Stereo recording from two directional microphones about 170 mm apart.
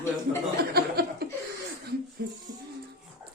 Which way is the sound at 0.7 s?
65° right (ahead or behind).